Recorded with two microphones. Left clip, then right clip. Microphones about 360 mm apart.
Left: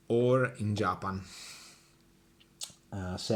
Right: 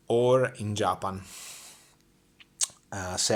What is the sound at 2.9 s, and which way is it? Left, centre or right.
Speech, right.